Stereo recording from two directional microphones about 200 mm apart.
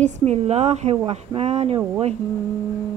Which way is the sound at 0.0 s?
35° right (ahead or behind).